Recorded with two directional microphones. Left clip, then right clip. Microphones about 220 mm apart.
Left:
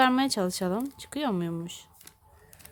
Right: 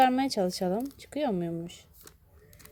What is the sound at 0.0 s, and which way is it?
A woman's voice, 10° left (ahead or behind).